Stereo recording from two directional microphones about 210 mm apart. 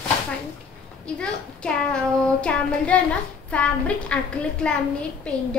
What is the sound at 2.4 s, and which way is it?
A woman's voice, 5° left (ahead or behind).